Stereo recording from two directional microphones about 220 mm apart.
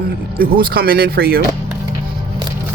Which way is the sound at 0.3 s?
40° right (ahead or behind).